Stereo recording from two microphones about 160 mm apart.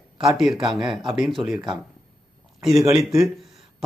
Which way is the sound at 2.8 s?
20° right (ahead or behind).